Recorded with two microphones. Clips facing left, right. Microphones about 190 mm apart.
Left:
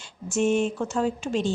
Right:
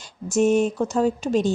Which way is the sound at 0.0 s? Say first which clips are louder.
Right 4 dB; 40° right (ahead or behind).